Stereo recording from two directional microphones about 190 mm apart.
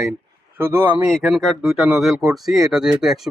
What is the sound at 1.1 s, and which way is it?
Speech, centre (ahead or behind).